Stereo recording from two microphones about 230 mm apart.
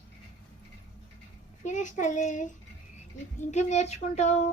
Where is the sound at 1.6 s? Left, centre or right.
Left.